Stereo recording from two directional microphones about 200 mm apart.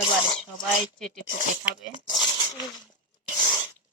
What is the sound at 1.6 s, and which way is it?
Speech, centre (ahead or behind).